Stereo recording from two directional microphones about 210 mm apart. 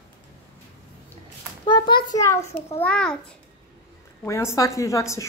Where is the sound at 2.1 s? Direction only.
15° left (ahead or behind).